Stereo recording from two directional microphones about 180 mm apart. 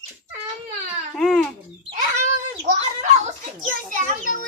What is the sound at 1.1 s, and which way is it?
Speech, centre (ahead or behind).